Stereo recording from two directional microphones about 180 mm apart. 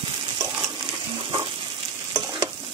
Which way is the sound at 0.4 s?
20° right (ahead or behind).